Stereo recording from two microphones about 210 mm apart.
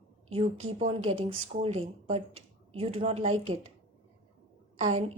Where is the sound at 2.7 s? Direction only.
25° right (ahead or behind).